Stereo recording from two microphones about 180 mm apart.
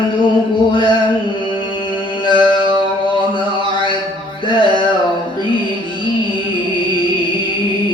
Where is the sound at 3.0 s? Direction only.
25° left (ahead or behind).